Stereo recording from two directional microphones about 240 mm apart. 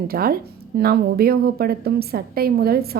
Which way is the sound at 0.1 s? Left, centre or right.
Right.